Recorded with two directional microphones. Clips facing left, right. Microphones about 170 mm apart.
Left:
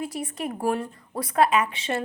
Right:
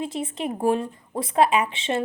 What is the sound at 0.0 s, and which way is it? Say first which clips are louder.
A woman's voice: right 2 dB; 25° right (ahead or behind).